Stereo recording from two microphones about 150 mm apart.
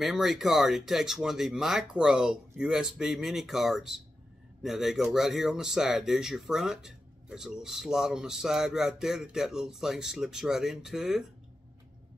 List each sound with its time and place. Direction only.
0.0 s speech: centre (ahead or behind)